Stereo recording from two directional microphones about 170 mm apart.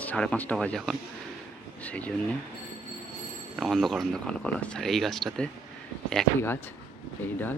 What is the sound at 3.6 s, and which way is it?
Speech, centre (ahead or behind).